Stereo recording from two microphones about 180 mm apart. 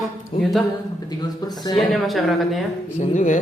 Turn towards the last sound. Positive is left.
turn(degrees=45)  # may be behind; listen again after turning